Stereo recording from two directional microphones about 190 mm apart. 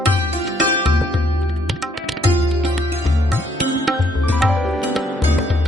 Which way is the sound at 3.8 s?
Centre (ahead or behind).